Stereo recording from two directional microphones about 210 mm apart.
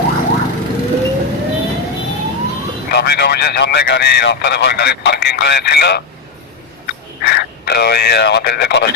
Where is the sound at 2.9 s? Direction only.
50° left (ahead or behind).